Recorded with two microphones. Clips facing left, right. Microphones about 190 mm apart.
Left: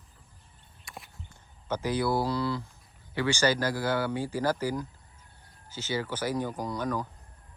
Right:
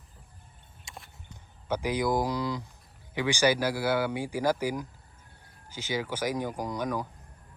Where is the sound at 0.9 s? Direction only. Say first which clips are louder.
Left 2 dB; 25° right (ahead or behind).